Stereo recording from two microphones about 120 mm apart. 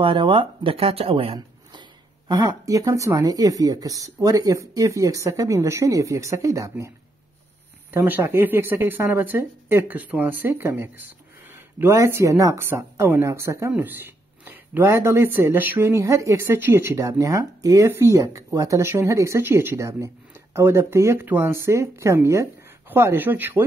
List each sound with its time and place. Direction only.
0.0 s speech: 45° right (ahead or behind); by 6.9 s 25° right (ahead or behind)
7.9 s speech: 15° right (ahead or behind)